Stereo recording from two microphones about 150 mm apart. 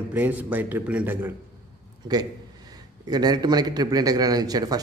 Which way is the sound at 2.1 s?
25° right (ahead or behind).